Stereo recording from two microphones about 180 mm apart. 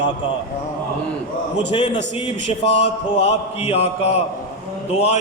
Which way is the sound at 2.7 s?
35° left (ahead or behind).